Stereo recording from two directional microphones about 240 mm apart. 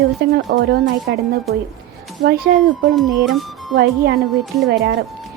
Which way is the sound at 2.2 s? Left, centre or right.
Right.